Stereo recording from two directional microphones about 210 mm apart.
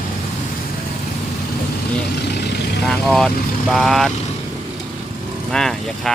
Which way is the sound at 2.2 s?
50° left (ahead or behind).